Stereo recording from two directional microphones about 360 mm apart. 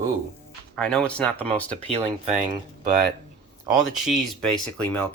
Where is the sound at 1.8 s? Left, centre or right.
Centre.